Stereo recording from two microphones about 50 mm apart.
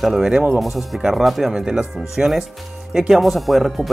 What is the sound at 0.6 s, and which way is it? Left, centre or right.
Speech, centre.